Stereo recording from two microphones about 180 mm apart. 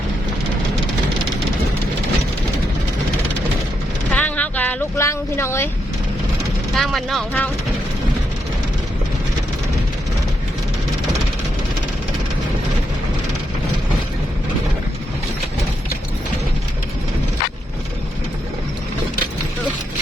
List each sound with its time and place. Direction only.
4.1 s vehicle: 10° left (ahead or behind)
6.7 s speech: centre (ahead or behind)